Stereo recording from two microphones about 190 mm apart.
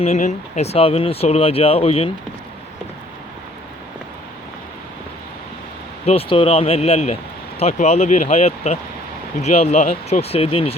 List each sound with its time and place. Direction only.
0.0 s speech: 35° left (ahead or behind)
6.1 s speech: 30° left (ahead or behind)